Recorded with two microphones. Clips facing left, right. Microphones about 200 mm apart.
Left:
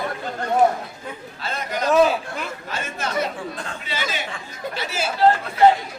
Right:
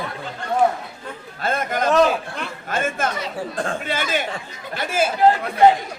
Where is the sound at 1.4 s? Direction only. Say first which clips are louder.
Right 5 dB; 50° right (ahead or behind).